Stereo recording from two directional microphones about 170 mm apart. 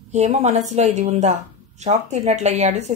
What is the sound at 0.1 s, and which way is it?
A woman's voice, 40° right (ahead or behind).